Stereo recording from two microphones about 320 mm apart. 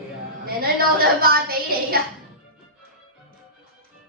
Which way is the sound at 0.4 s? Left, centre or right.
Right.